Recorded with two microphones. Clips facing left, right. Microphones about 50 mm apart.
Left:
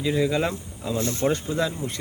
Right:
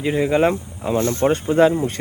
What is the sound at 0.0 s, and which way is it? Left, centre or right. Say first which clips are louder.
Speech: right 6 dB; right.